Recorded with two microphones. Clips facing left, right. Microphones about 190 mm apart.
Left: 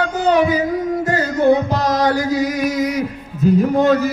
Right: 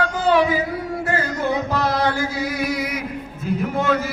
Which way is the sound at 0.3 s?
40° left (ahead or behind).